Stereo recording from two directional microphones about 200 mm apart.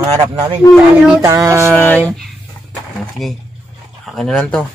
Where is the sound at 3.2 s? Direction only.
Centre (ahead or behind).